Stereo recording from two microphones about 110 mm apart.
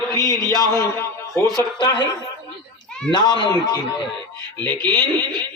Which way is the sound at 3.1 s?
40° left (ahead or behind).